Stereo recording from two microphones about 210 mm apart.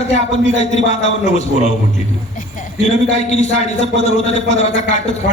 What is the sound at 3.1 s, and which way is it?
A man's voice, 30° left (ahead or behind).